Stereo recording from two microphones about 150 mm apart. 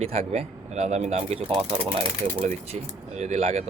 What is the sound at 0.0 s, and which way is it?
Speech, 45° right (ahead or behind).